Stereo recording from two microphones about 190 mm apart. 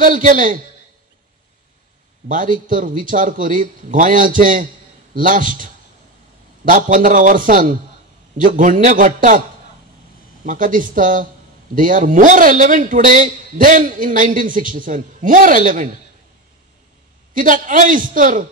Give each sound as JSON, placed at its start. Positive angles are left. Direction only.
{"t": 0.0, "sound": "a man's voice", "side_deg": -45}
{"t": 2.2, "sound": "a man's voice", "side_deg": -45}
{"t": 10.4, "sound": "a man's voice", "side_deg": -45}
{"t": 17.3, "sound": "a man's voice", "side_deg": -45}